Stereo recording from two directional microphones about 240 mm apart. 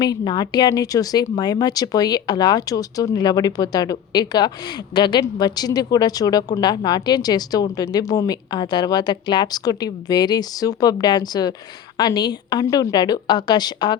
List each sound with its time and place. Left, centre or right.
0.0 s speech: centre